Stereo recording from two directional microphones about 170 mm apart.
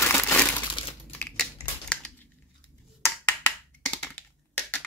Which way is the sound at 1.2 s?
5° left (ahead or behind).